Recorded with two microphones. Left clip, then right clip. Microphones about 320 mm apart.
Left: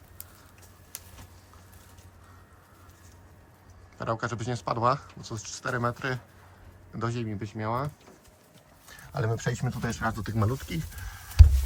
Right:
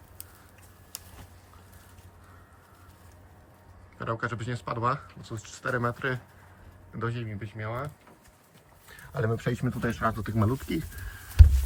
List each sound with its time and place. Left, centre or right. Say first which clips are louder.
3.9 s speech: left 1 dB; centre
8.9 s speech: right 1 dB; centre